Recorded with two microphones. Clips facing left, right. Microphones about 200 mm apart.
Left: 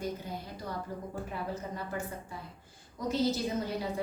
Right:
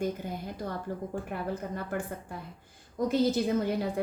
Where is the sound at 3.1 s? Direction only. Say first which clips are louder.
Right 3 dB; 55° right (ahead or behind).